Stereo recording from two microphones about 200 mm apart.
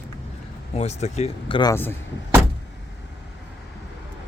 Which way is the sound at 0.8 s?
35° left (ahead or behind).